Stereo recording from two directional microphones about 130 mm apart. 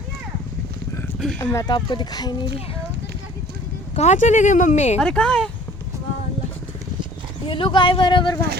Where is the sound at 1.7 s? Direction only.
35° left (ahead or behind).